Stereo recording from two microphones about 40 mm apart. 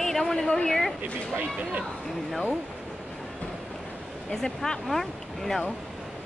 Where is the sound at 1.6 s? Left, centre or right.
Right.